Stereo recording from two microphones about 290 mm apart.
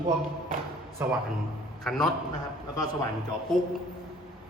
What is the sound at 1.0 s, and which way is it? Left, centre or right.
A man's voice, centre.